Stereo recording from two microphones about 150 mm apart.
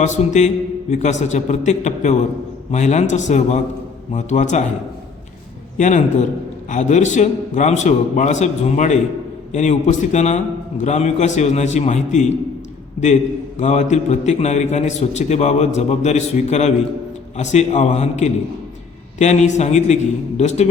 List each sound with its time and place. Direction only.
0.0 s a man's voice: 50° left (ahead or behind)
5.7 s a man's voice: 55° left (ahead or behind)
13.0 s a man's voice: 35° left (ahead or behind)
13.6 s a man's voice: 50° left (ahead or behind)